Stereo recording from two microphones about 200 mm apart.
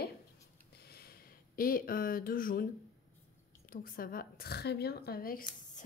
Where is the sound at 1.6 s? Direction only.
45° left (ahead or behind).